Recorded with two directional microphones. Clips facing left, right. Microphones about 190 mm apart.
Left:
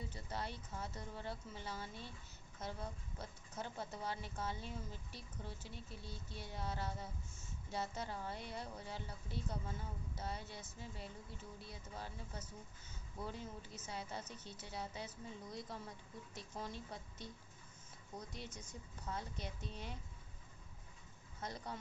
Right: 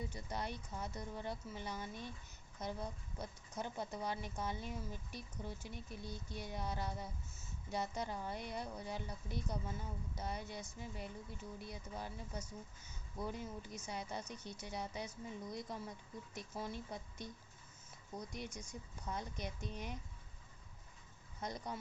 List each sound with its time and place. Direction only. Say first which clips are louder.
0.1 s speech: right 2 dB; 15° right (ahead or behind)
21.4 s speech: right 2 dB; 15° right (ahead or behind)